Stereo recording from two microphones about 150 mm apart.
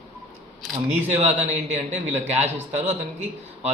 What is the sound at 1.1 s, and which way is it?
Speech, 50° right (ahead or behind).